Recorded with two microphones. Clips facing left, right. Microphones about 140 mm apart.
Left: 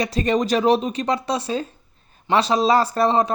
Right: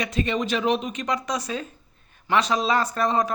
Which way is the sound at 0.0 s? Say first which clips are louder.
Left 5 dB; 35° left (ahead or behind).